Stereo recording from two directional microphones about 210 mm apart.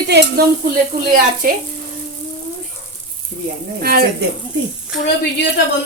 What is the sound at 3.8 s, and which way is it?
Speech, 45° right (ahead or behind).